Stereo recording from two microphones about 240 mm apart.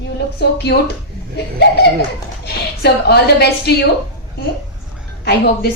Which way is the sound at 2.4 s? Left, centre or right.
Left.